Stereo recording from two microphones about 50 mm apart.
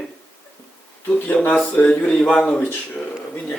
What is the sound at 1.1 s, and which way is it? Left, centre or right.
Speech, left.